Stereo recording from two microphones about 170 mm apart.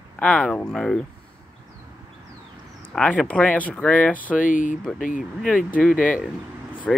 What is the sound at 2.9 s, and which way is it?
Speech, 5° left (ahead or behind).